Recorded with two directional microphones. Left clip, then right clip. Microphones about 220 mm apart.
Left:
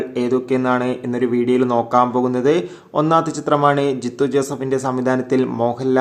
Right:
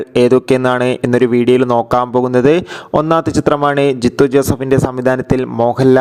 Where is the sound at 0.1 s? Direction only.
45° right (ahead or behind).